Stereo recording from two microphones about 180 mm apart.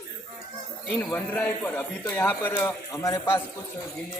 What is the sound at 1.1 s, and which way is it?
A man's voice, 10° left (ahead or behind).